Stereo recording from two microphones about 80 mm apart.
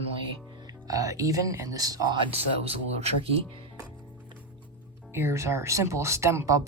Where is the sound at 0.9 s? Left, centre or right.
Right.